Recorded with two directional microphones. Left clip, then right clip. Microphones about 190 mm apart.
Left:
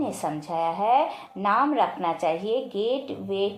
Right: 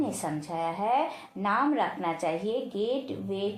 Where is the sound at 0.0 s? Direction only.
25° left (ahead or behind).